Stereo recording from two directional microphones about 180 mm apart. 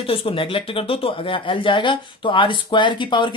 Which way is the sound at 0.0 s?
30° left (ahead or behind).